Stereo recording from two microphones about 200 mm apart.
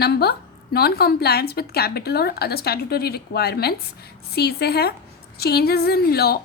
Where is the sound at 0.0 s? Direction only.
55° left (ahead or behind).